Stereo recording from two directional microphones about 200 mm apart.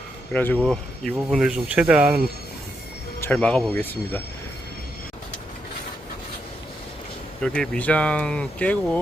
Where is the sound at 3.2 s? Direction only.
5° left (ahead or behind).